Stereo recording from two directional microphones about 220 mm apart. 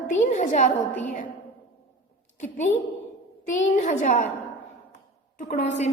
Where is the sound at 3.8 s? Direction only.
35° left (ahead or behind).